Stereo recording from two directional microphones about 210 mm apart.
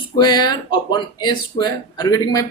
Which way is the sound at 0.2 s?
20° left (ahead or behind).